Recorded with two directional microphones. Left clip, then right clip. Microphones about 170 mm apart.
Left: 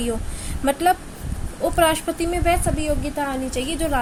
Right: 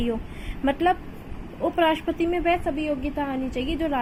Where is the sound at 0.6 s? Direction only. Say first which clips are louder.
Left 3 dB; 15° left (ahead or behind).